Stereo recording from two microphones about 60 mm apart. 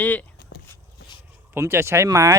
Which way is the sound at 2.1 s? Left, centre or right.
Right.